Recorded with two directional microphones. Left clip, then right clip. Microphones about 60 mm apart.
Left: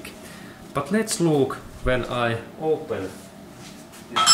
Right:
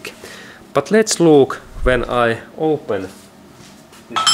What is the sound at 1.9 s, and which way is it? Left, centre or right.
Speech, right.